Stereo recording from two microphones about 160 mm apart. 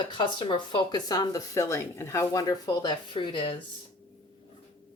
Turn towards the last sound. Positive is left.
turn(degrees=30)  # may be behind; listen again after turning